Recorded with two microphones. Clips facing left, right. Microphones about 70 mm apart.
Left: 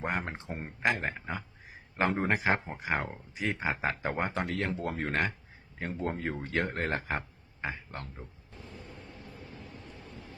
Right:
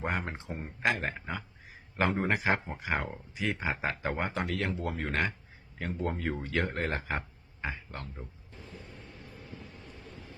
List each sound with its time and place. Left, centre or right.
0.1 s speech: left
1.1 s speech: centre
2.0 s speech: left